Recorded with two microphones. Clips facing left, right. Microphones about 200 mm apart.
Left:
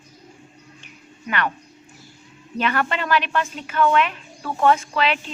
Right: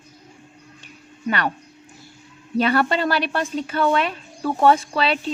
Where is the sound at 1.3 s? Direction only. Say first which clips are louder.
Right 2 dB; 35° right (ahead or behind).